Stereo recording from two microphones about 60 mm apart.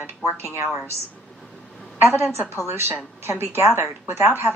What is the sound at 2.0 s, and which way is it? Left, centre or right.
A woman's voice, right.